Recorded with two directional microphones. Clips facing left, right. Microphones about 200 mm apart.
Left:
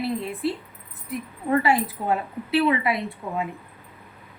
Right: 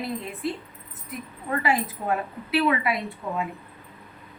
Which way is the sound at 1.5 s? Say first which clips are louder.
Left 4 dB; 30° left (ahead or behind).